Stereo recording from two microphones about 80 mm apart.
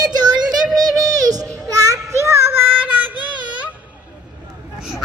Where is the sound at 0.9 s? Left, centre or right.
Right; by 3.7 s centre.